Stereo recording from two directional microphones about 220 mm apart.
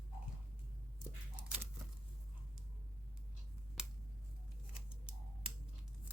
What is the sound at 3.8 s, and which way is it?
Finger snapping, 5° right (ahead or behind).